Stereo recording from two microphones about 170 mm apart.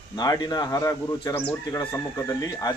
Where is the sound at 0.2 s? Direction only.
25° left (ahead or behind).